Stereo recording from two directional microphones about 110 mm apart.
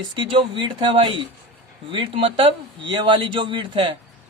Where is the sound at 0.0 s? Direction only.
45° right (ahead or behind).